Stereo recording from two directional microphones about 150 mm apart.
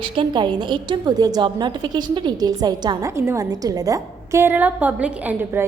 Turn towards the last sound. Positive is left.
turn(degrees=-15)  # may be behind; listen again after turning